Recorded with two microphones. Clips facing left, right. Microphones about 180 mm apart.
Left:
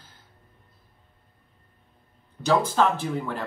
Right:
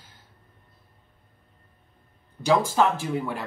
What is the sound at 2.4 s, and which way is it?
Speech, 10° right (ahead or behind).